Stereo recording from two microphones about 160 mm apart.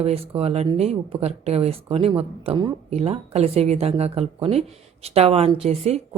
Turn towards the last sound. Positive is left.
turn(degrees=-40)  # may be behind; listen again after turning